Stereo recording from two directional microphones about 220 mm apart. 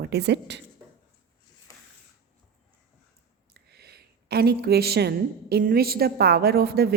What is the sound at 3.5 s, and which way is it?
A woman's voice, 45° right (ahead or behind).